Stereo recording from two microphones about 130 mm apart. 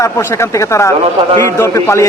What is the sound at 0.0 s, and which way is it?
Speech, 20° left (ahead or behind).